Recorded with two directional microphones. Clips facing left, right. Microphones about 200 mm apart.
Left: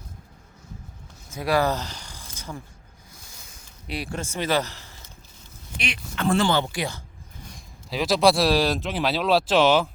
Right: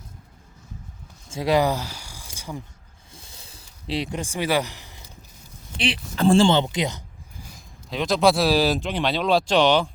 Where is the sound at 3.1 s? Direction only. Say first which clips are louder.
Right 4 dB; 30° right (ahead or behind); by 5.0 s 15° right (ahead or behind).